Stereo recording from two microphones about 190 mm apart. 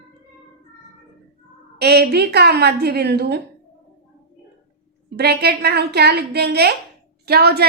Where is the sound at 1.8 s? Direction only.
60° right (ahead or behind).